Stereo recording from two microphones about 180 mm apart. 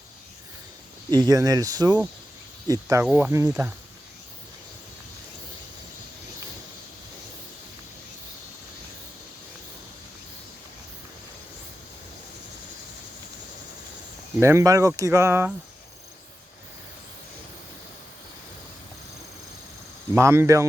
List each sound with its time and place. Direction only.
1.1 s speech: 20° right (ahead or behind)
14.3 s speech: 15° right (ahead or behind)
20.1 s speech: 15° right (ahead or behind)